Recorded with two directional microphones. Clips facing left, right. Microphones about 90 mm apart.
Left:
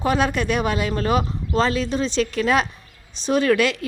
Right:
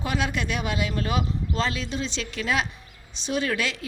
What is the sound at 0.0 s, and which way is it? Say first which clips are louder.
Speech: left 7 dB; 45° left (ahead or behind).